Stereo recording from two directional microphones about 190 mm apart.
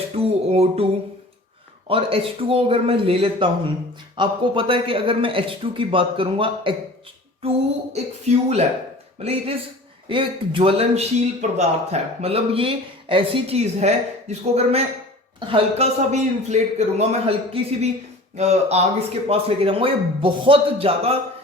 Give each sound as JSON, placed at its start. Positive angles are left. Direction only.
{"t": 0.2, "sound": "a sound", "side_deg": -30}
{"t": 1.9, "sound": "a man's voice", "side_deg": -30}
{"t": 7.9, "sound": "a man's voice", "side_deg": -35}